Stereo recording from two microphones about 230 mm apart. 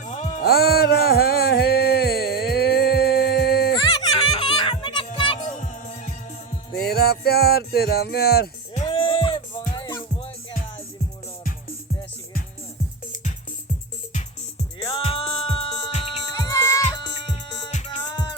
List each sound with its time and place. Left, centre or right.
0.4 s music: left
4.0 s music: centre
6.7 s music: left
8.9 s music: left
14.9 s music: left